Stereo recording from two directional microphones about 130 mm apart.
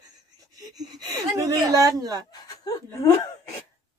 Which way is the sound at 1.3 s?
30° right (ahead or behind).